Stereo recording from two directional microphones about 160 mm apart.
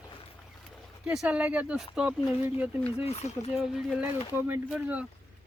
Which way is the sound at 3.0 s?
45° left (ahead or behind).